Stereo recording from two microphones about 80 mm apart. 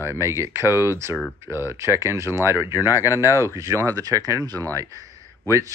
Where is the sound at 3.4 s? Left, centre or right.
Right.